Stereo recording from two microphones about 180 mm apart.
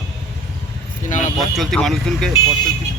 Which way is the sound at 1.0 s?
45° left (ahead or behind).